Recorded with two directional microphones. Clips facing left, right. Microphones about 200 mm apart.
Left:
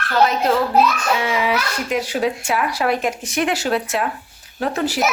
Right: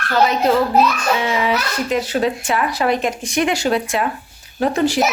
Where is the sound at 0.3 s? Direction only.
Centre (ahead or behind).